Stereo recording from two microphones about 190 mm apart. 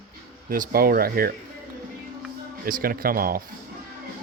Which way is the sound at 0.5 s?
50° right (ahead or behind).